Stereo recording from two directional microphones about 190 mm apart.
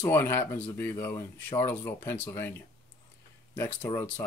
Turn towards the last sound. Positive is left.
turn(degrees=10)  # may be behind; listen again after turning